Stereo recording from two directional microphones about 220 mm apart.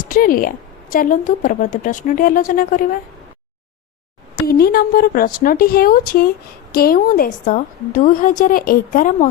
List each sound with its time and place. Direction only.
0.0 s a woman's voice: 40° left (ahead or behind)
4.5 s a woman's voice: 45° left (ahead or behind)